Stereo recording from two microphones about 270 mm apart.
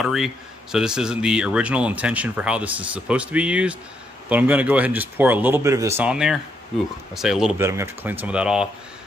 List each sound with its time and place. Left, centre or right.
0.0 s speech: centre